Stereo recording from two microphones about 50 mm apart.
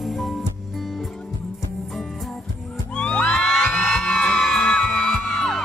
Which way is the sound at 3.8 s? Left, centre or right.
Centre.